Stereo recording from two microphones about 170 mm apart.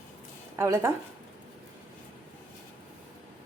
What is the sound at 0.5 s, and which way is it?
Speech, 15° right (ahead or behind).